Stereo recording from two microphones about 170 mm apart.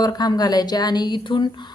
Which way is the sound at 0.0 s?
25° left (ahead or behind).